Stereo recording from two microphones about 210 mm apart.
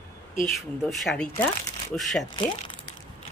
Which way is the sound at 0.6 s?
Centre (ahead or behind).